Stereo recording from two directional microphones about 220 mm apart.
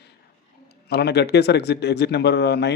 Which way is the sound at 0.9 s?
50° left (ahead or behind).